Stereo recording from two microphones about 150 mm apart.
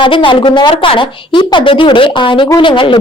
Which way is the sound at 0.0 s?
35° left (ahead or behind).